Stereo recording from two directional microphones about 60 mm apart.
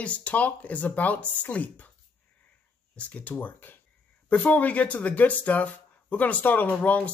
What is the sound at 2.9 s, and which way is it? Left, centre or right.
Speech, left.